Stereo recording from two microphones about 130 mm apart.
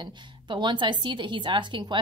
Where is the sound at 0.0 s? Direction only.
35° right (ahead or behind).